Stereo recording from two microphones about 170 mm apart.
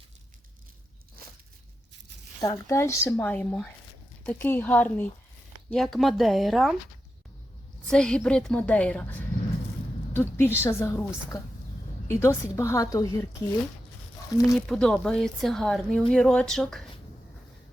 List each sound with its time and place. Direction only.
2.4 s a woman's voice: 20° left (ahead or behind); by 6.7 s centre (ahead or behind)
7.9 s a woman's voice: 5° left (ahead or behind)
14.3 s speech: 20° left (ahead or behind)
14.7 s speech: 5° left (ahead or behind)